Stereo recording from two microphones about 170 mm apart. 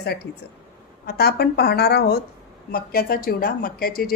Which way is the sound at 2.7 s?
60° left (ahead or behind).